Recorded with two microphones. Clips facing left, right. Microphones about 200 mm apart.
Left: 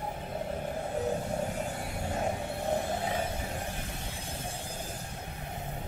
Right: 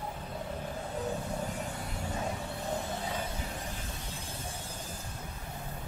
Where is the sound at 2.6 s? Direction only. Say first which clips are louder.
Left 5 dB; 50° left (ahead or behind).